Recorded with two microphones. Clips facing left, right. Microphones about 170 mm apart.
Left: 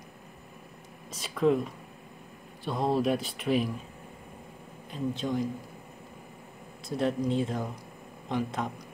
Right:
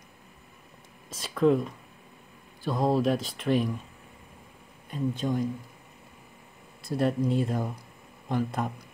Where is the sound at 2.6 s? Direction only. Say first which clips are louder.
Right 2 dB; centre (ahead or behind).